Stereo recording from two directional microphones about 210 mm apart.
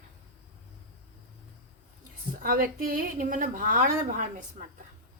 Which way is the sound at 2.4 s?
45° right (ahead or behind).